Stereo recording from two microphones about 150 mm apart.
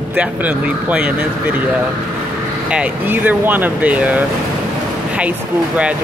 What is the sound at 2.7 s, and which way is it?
Speech, 10° right (ahead or behind).